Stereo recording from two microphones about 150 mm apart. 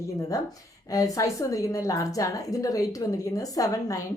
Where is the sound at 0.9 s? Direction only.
25° left (ahead or behind).